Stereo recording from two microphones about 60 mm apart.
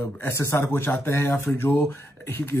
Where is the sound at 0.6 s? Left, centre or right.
Left.